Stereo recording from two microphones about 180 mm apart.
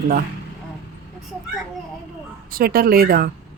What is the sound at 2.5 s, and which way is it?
Speech, 55° right (ahead or behind).